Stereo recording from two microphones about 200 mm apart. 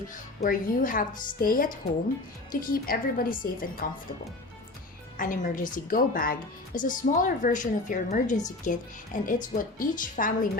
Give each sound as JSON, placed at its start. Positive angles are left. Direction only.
{"t": 0.4, "sound": "a woman's voice", "side_deg": 45}
{"t": 5.1, "sound": "a woman's voice", "side_deg": 40}